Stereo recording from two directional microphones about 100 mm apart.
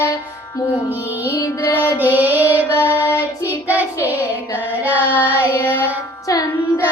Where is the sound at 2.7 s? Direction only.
20° left (ahead or behind).